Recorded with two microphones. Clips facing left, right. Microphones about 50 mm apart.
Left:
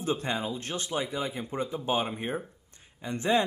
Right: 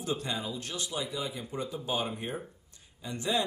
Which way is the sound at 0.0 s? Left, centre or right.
Left.